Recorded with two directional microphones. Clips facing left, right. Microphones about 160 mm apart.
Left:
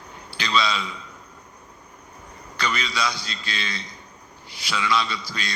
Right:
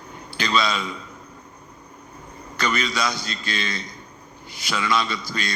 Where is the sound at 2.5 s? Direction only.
45° right (ahead or behind).